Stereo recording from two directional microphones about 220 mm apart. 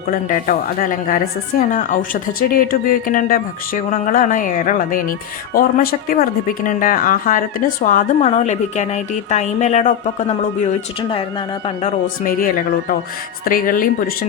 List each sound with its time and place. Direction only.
0.1 s a woman's voice: 40° left (ahead or behind)
11.8 s a woman's voice: 35° left (ahead or behind)